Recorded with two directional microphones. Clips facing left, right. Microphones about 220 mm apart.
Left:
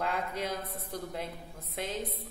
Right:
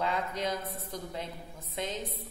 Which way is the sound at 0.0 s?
10° left (ahead or behind).